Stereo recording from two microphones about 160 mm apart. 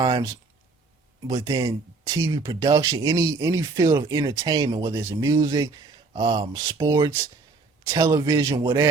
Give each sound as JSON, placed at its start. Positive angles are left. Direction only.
{"t": 0.0, "sound": "speech", "side_deg": -25}